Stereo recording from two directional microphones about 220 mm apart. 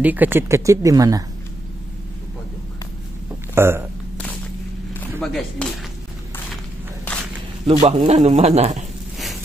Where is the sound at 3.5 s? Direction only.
10° right (ahead or behind).